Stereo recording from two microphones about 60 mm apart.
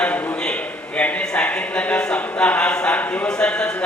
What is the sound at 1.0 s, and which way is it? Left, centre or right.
Speech, left.